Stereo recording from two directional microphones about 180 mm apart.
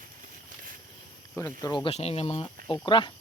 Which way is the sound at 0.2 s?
50° right (ahead or behind).